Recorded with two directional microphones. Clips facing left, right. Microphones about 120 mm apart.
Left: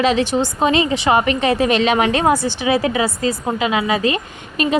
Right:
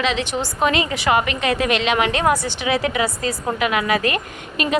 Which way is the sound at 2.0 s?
30° left (ahead or behind).